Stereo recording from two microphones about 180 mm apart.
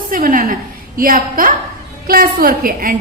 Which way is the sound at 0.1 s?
50° right (ahead or behind).